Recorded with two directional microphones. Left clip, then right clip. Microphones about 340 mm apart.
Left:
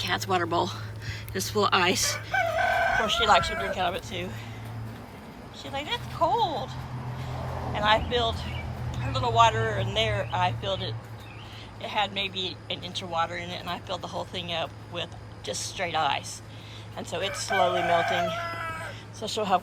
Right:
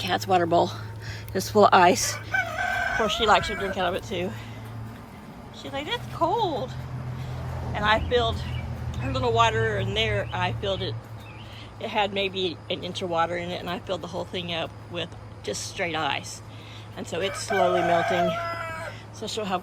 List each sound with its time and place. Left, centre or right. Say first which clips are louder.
0.0 s speech: right 4 dB; centre
2.1 s chicken: left 1 dB; left
3.0 s speech: right 4 dB; centre
5.6 s speech: right 1 dB; centre
7.7 s speech: right 1 dB; centre
18.9 s a sound: even; centre